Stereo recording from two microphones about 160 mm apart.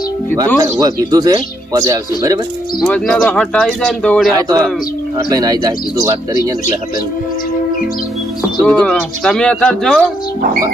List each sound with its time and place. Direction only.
0.6 s speech: 25° right (ahead or behind)
2.8 s speech: 5° left (ahead or behind)
4.4 s speech: 20° right (ahead or behind)
8.6 s speech: 5° left (ahead or behind)